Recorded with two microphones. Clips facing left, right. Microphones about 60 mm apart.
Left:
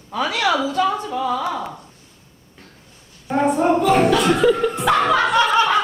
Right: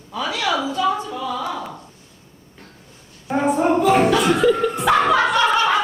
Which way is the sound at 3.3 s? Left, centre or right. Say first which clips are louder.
Left 1 dB; centre.